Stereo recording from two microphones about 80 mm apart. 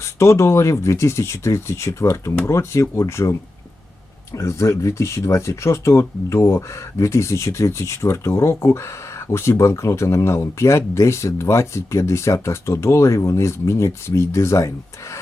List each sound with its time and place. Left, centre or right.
0.0 s speech: left